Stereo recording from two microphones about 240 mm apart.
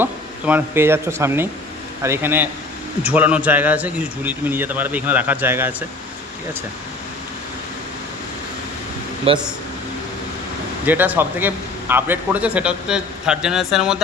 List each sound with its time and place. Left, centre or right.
0.0 s a man's voice: centre
9.3 s a man's voice: right
10.8 s a man's voice: centre